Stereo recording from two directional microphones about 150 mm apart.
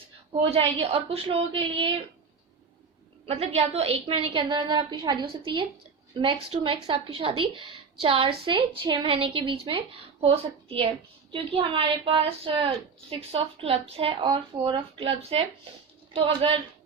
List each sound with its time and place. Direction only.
0.5 s speech: 40° right (ahead or behind)
3.2 s speech: 45° right (ahead or behind)